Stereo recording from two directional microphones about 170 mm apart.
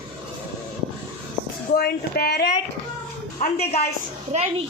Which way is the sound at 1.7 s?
65° left (ahead or behind).